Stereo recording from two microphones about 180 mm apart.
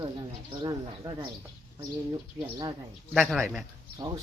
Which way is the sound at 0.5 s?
25° right (ahead or behind).